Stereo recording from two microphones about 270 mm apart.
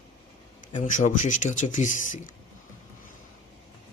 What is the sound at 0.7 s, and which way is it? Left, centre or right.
Speech, left.